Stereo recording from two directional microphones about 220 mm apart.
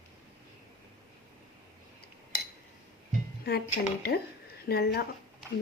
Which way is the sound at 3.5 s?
45° left (ahead or behind).